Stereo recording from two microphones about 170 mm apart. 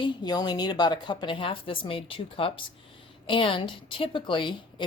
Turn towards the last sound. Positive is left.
turn(degrees=30)  # may be behind; listen again after turning